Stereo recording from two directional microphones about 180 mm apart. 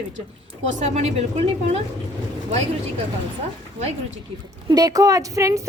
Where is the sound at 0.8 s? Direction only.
40° right (ahead or behind).